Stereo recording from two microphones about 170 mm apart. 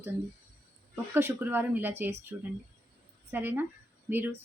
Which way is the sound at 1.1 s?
15° right (ahead or behind).